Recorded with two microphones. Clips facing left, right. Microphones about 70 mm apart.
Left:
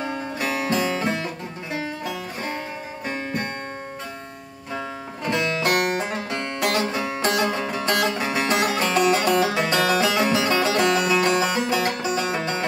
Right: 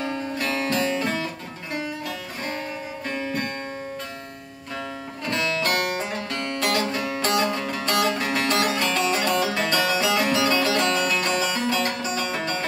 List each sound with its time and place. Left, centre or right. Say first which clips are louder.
0.0 s music: even; centre
5.2 s music: left 2 dB; centre